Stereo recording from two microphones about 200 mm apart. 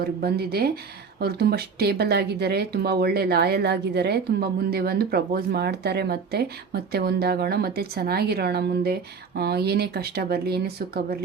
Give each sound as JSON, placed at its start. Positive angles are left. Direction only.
{"t": 0.0, "sound": "speech", "side_deg": -50}